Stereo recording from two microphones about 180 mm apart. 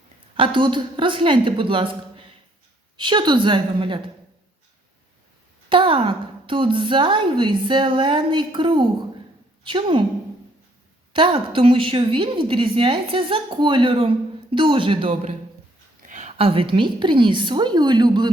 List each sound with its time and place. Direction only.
0.3 s a woman's voice: 30° right (ahead or behind)
5.6 s a woman's voice: 30° right (ahead or behind)
11.1 s a woman's voice: 30° right (ahead or behind)
16.0 s a woman's voice: 40° right (ahead or behind); by 18.3 s 25° right (ahead or behind)